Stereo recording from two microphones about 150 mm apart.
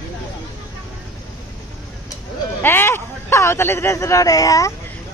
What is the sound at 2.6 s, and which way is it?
A man's voice, 15° left (ahead or behind).